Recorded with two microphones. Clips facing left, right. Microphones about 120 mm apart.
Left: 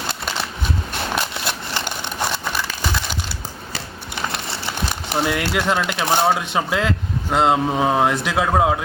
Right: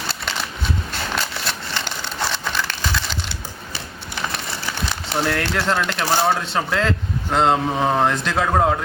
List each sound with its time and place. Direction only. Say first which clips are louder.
1.1 s a sound: left 2 dB; 15° left (ahead or behind)
2.3 s crumpling: even; 10° left (ahead or behind)
4.3 s crumpling: left 1 dB; 25° left (ahead or behind)
5.0 s speech: left 1 dB; 10° left (ahead or behind)